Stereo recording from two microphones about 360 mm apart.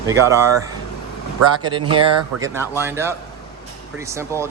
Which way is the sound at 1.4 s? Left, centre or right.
Right.